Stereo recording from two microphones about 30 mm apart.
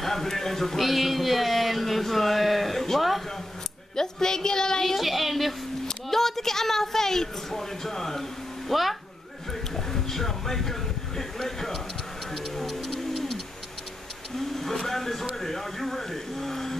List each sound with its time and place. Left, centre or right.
0.0 s speech: centre
0.8 s speech: centre
3.9 s a woman's voice: centre
4.8 s speech: centre
6.0 s a woman's voice: centre
8.6 s speech: centre
9.5 s a sound: centre
12.3 s tick-tock: centre
13.1 s bird: centre
14.6 s speech: centre